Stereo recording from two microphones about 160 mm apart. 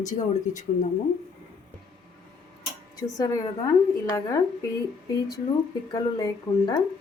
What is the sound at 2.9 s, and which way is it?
Speech, 25° left (ahead or behind).